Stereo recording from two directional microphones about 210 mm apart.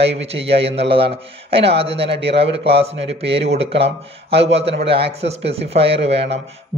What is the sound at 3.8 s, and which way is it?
Speech, 55° right (ahead or behind).